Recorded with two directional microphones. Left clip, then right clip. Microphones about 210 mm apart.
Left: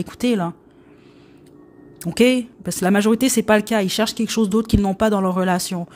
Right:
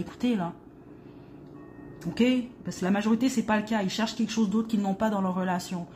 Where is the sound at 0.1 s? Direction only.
45° left (ahead or behind).